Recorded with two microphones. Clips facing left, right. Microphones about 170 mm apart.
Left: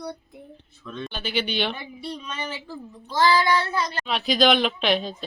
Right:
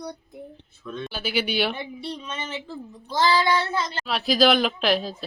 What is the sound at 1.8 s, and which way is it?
Speech, 25° right (ahead or behind).